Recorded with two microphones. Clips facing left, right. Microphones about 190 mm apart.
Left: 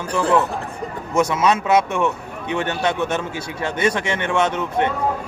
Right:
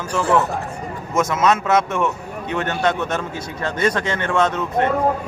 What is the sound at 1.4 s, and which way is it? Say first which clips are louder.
Speech: right 2 dB; 10° left (ahead or behind).